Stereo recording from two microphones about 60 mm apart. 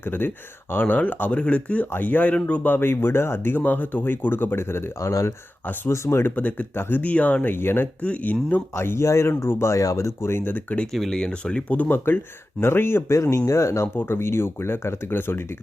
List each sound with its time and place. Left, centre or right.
0.0 s speech: left
4.9 s speech: left
5.6 s speech: left
5.9 s speech: left
6.3 s speech: left
6.7 s speech: left
7.0 s speech: left
8.0 s speech: left
8.7 s speech: left
10.2 s speech: left
11.1 s speech: centre
11.8 s speech: left
13.3 s speech: left
13.8 s speech: left